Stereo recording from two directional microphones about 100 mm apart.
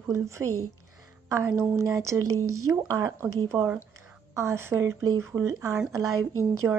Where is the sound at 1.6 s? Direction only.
30° right (ahead or behind).